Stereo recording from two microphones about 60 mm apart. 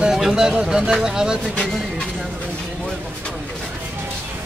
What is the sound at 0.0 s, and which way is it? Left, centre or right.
A man's voice, centre.